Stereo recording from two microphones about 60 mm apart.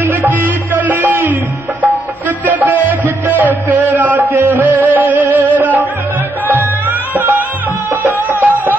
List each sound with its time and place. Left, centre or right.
0.0 s music: right